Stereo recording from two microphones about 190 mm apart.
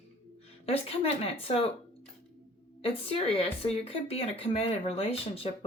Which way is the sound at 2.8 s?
30° left (ahead or behind).